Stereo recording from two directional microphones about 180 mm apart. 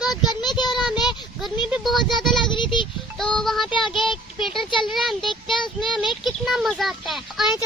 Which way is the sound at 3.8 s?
Centre (ahead or behind).